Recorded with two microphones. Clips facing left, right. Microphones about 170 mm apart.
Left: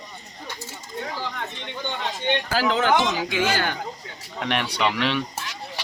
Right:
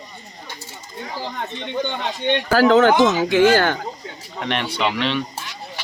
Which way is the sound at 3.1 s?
60° right (ahead or behind).